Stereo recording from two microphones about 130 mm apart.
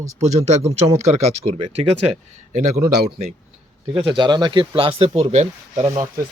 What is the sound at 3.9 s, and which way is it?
Speech, 40° right (ahead or behind).